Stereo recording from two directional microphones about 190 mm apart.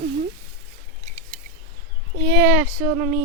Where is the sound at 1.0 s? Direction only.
35° right (ahead or behind).